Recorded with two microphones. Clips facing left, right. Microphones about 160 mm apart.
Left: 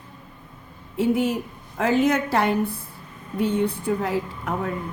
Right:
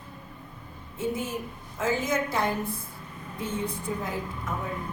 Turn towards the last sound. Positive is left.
turn(degrees=70)  # may be behind; listen again after turning